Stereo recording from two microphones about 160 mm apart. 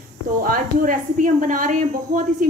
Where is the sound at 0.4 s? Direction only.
60° right (ahead or behind).